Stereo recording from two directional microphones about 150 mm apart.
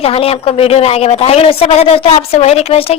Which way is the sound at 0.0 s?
40° left (ahead or behind).